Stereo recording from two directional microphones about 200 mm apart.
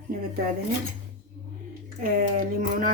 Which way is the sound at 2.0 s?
45° right (ahead or behind).